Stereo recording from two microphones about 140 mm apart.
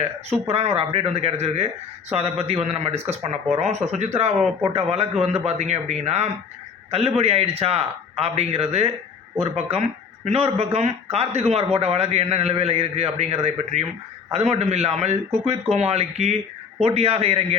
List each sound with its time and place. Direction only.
0.3 s speech: 45° right (ahead or behind)
4.4 s speech: centre (ahead or behind)
4.7 s speech: 50° right (ahead or behind)